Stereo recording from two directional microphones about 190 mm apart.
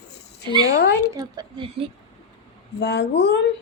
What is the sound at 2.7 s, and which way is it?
Speech, 60° left (ahead or behind).